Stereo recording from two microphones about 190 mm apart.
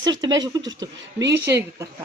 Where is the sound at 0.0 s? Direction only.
20° right (ahead or behind).